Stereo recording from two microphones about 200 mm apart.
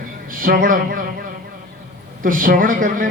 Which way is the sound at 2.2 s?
45° right (ahead or behind).